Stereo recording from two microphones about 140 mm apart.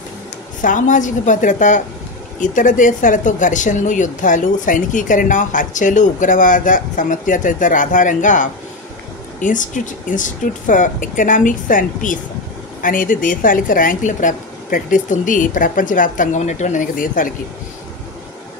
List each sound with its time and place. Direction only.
0.6 s a woman's voice: 70° left (ahead or behind)